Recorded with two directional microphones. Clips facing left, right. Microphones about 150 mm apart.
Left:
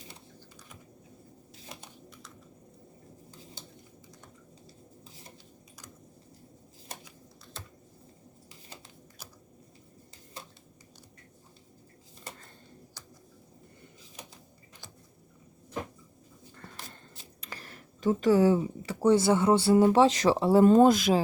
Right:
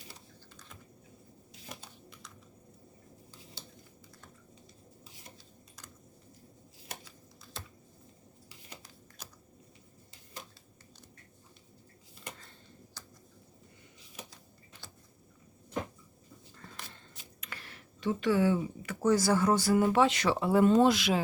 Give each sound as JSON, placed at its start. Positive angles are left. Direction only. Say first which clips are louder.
{"t": 17.4, "sound": "speech", "louder": "left 3 dB", "side_deg": 40}